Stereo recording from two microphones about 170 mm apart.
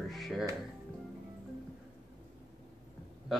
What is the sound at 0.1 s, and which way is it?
Music, centre (ahead or behind).